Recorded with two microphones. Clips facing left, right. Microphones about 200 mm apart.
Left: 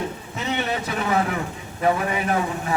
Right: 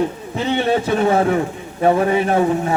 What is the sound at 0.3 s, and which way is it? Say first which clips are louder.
A man's voice: right 8 dB; 30° right (ahead or behind).